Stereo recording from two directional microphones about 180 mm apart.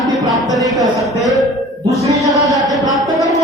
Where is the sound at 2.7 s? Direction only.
Centre (ahead or behind).